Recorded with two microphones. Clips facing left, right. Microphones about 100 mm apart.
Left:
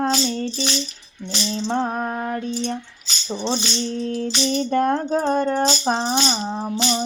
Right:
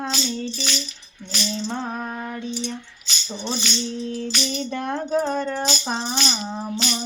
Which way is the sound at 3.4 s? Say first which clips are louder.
Left 4 dB; 30° left (ahead or behind).